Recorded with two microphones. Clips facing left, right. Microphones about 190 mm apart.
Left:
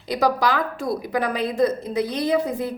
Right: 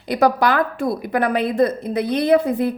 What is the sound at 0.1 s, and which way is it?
A woman's voice, 55° right (ahead or behind).